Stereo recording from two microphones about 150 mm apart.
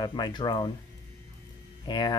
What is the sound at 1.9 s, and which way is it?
Speech, 30° left (ahead or behind).